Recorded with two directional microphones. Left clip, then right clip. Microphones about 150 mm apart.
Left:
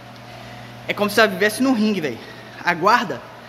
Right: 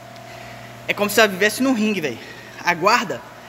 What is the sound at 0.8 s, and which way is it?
A man's voice, 5° left (ahead or behind).